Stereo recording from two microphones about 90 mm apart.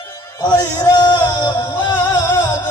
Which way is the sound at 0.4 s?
50° left (ahead or behind).